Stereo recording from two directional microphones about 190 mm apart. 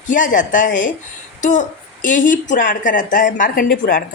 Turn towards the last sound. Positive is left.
turn(degrees=45)  # may be behind; listen again after turning